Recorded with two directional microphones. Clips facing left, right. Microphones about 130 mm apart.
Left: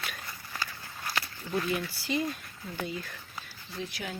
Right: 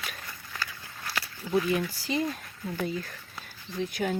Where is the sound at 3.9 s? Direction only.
50° right (ahead or behind).